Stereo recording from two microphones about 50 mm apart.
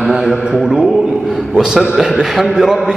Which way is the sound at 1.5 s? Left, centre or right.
Centre.